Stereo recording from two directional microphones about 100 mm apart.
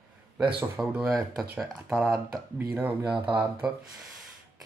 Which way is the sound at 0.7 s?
5° right (ahead or behind).